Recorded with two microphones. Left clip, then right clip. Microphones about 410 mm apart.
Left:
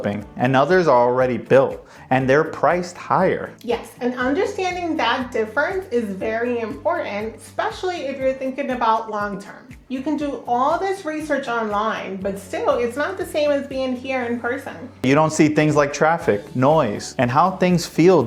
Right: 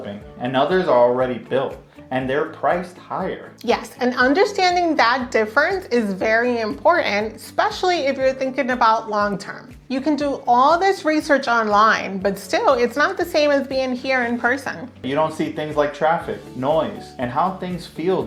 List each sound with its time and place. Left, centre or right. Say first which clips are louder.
0.3 s speech: left 2 dB; left
3.7 s speech: right 4 dB; right
6.8 s speech: right 7 dB; right
15.0 s speech: left 5 dB; left